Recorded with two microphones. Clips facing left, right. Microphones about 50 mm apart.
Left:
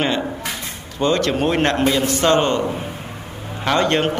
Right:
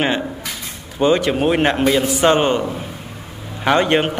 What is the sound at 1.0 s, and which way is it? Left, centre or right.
A man's voice, centre.